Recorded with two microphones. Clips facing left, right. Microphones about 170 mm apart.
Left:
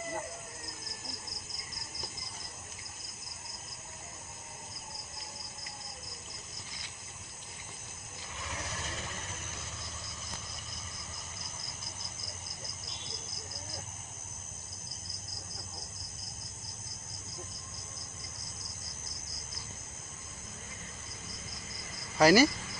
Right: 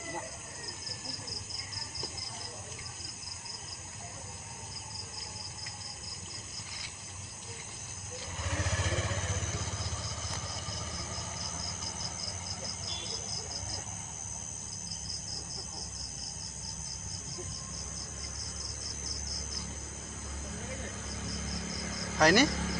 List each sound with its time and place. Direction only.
8.5 s vehicle: 80° right
21.2 s cricket: 90° right
22.2 s speech: 5° left (ahead or behind)
22.4 s cricket: 90° right